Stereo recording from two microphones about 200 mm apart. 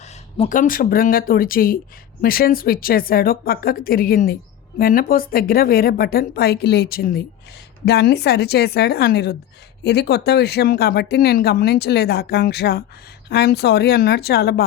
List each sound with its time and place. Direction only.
0.3 s a woman's voice: 40° left (ahead or behind)